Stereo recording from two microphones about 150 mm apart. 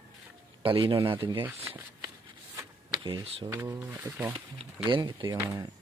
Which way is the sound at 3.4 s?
20° right (ahead or behind).